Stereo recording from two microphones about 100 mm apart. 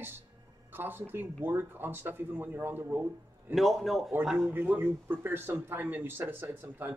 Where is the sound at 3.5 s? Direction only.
Centre (ahead or behind).